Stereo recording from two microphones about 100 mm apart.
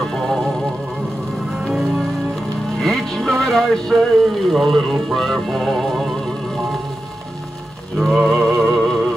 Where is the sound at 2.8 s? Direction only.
Centre (ahead or behind).